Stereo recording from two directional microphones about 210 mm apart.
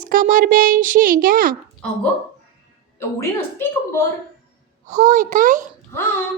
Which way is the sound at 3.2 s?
10° left (ahead or behind).